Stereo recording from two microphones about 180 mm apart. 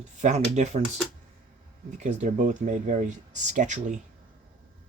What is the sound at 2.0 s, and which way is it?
Speech, 40° right (ahead or behind).